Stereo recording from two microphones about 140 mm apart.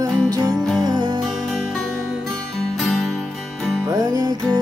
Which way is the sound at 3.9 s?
25° right (ahead or behind).